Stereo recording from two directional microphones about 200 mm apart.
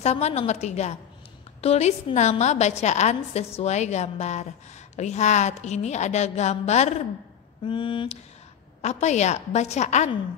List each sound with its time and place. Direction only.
0.0 s a woman's voice: 35° left (ahead or behind)
8.8 s a woman's voice: 35° left (ahead or behind)